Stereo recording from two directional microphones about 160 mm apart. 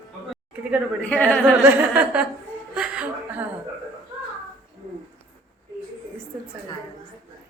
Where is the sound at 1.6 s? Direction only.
10° right (ahead or behind).